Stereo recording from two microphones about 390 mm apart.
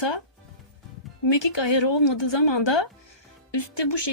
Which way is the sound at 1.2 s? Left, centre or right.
Left.